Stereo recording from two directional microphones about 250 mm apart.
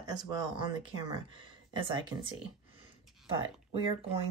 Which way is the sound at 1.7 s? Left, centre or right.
Centre.